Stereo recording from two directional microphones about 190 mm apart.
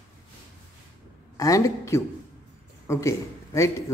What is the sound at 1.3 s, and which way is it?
A man's voice, 20° left (ahead or behind).